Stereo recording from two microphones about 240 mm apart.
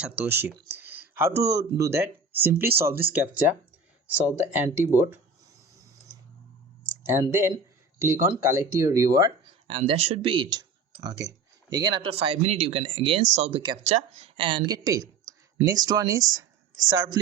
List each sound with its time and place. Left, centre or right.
0.0 s speech: centre
7.1 s speech: centre